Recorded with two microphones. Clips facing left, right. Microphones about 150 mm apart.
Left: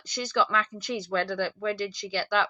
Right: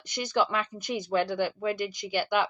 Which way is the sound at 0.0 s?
20° right (ahead or behind).